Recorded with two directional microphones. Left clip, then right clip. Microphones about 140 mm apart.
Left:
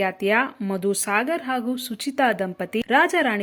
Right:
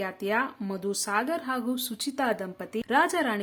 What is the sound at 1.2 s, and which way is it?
Speech, 20° left (ahead or behind).